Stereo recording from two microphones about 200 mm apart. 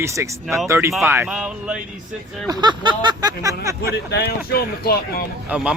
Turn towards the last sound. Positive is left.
turn(degrees=-5)  # may be behind; listen again after turning